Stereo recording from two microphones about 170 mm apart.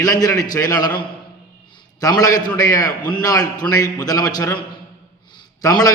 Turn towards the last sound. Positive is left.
turn(degrees=20)  # may be behind; listen again after turning